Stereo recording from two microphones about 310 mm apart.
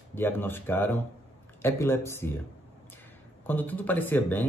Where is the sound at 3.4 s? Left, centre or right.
Centre.